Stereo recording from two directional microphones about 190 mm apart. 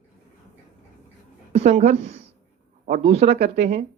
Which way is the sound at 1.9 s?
35° right (ahead or behind).